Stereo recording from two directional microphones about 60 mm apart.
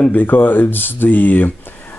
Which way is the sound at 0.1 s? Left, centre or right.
Left.